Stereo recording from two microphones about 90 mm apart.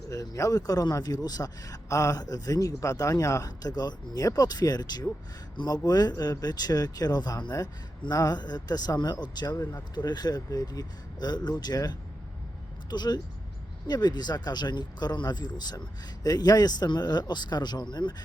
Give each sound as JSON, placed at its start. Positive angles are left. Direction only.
{"t": 0.1, "sound": "speech", "side_deg": 40}